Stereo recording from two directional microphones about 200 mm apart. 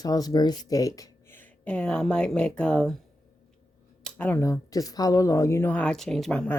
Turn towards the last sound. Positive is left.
turn(degrees=5)  # may be behind; listen again after turning